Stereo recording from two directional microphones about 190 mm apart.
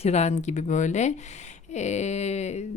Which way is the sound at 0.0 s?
35° left (ahead or behind).